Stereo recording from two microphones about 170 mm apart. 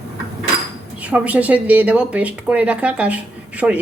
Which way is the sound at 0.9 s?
10° right (ahead or behind).